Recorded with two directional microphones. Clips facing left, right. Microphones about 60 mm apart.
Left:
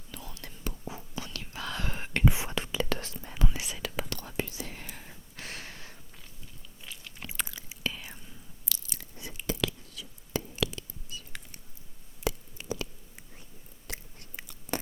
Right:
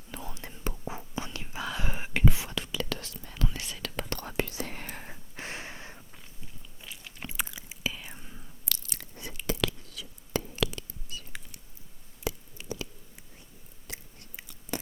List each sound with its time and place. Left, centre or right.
0.1 s whispering: right; by 2.2 s centre
2.3 s whispering: left
3.3 s whispering: centre
4.3 s whispering: right
4.6 s whispering: right
5.4 s a sound: right
6.8 s biting: centre
7.9 s whispering: centre
8.7 s a sound: right
12.2 s a sound: left
13.8 s chewing: left